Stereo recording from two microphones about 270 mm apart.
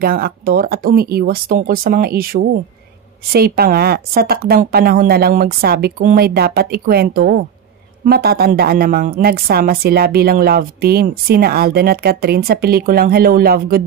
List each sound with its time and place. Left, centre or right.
0.0 s a woman's voice: right